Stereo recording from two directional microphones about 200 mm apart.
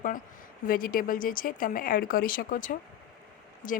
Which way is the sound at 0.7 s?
45° left (ahead or behind).